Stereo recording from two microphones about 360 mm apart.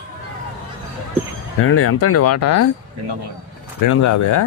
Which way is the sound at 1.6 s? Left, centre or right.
Left.